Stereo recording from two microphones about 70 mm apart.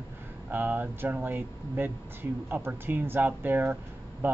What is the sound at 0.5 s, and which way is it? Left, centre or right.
Speech, right.